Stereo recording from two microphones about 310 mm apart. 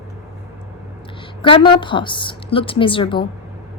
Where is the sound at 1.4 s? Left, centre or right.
Centre.